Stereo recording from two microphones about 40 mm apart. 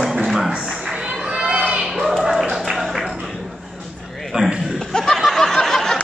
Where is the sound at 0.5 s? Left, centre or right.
Right.